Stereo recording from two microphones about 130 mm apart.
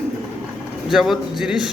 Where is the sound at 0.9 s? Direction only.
Centre (ahead or behind).